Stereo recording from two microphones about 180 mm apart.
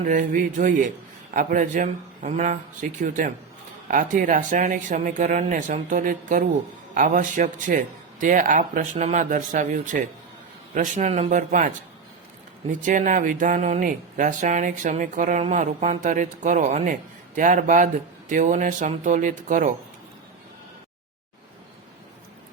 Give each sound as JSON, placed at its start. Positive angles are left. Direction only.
{"t": 0.0, "sound": "speech", "side_deg": -45}
{"t": 12.8, "sound": "speech", "side_deg": -45}